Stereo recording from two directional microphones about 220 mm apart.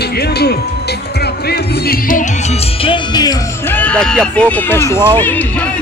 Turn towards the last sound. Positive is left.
turn(degrees=5)  # may be behind; listen again after turning